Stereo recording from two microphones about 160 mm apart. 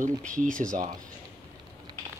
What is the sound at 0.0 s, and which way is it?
Speech, 55° right (ahead or behind).